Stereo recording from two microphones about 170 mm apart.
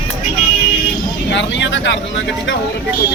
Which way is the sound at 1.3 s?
90° left.